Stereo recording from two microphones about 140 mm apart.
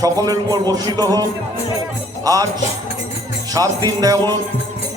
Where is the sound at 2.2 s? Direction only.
25° right (ahead or behind).